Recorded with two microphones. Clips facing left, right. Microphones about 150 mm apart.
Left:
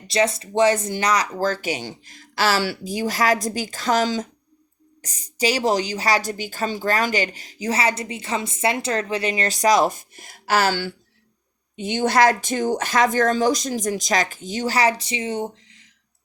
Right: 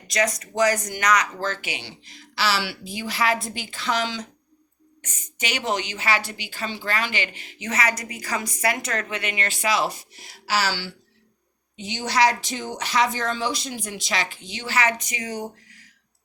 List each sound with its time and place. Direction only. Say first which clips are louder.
0.1 s speech: left 4 dB; 30° left (ahead or behind)